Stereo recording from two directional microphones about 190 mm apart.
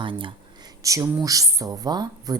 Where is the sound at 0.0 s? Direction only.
25° right (ahead or behind).